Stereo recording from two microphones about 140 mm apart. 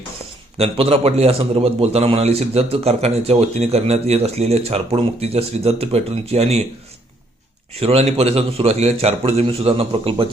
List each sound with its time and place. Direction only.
0.5 s a man's voice: 45° right (ahead or behind)
7.7 s a man's voice: 45° right (ahead or behind)